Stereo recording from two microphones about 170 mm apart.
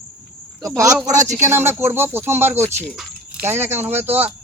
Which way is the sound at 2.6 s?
40° right (ahead or behind).